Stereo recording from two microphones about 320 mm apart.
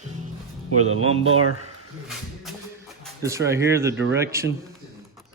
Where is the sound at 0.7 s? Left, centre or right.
Right.